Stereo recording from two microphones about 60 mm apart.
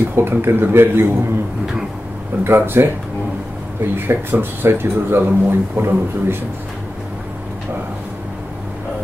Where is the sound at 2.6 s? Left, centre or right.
Right.